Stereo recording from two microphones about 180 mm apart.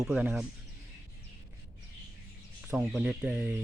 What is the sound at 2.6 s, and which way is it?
Speech, 5° right (ahead or behind).